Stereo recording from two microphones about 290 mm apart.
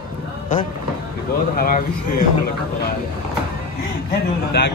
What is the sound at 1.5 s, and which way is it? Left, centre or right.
Speech, left.